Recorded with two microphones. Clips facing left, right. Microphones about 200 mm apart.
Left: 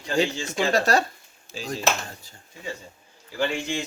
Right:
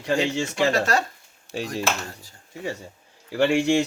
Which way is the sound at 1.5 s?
65° right (ahead or behind).